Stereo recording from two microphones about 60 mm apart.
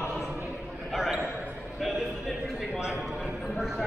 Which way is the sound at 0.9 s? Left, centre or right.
Centre.